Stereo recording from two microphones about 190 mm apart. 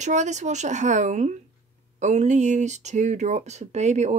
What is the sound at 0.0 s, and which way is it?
Speech, 40° right (ahead or behind).